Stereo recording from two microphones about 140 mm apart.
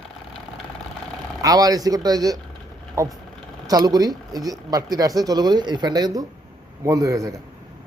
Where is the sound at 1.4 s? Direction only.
25° right (ahead or behind).